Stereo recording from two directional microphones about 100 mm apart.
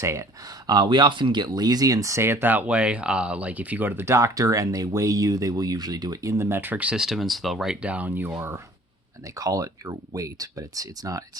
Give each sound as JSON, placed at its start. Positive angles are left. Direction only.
{"t": 0.0, "sound": "speech", "side_deg": -30}
{"t": 0.7, "sound": "speech", "side_deg": -45}
{"t": 9.4, "sound": "speech", "side_deg": -35}